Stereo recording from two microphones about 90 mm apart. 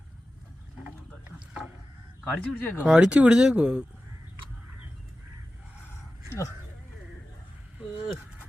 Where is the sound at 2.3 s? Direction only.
15° left (ahead or behind).